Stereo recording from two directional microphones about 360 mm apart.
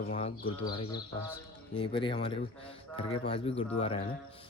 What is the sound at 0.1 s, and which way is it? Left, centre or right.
Speech, centre.